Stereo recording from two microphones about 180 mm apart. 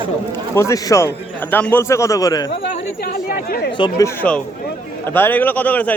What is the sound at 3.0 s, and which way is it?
Speech, 55° left (ahead or behind).